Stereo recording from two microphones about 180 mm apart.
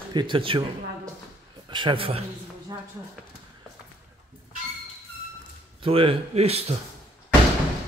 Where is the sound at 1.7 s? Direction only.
25° right (ahead or behind).